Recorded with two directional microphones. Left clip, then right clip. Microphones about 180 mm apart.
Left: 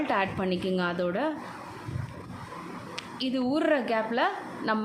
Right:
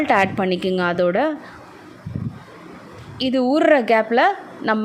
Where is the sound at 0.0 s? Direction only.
35° right (ahead or behind).